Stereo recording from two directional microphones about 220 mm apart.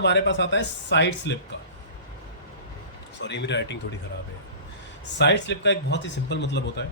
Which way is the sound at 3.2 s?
55° left (ahead or behind).